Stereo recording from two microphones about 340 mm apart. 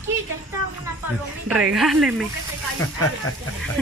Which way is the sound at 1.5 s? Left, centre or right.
Centre.